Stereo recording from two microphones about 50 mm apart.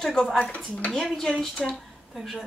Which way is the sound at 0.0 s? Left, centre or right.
Centre.